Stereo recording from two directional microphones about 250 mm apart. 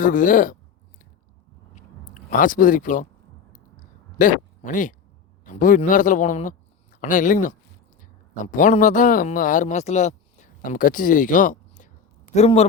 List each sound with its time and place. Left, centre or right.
0.0 s speech: left
2.3 s speech: left
4.2 s a man's voice: left